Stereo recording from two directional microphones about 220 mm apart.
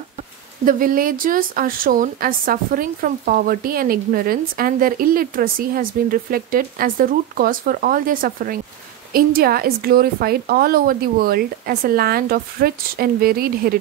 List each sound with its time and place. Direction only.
0.7 s a woman's voice: 40° right (ahead or behind)